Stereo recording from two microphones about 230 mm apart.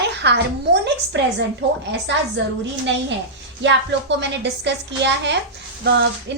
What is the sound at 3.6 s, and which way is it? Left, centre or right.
A woman's voice, right.